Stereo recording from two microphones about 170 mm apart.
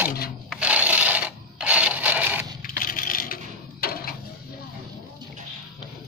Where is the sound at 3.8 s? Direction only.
65° left (ahead or behind).